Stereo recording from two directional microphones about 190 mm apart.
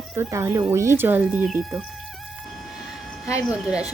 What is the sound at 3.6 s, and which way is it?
Speech, 5° right (ahead or behind).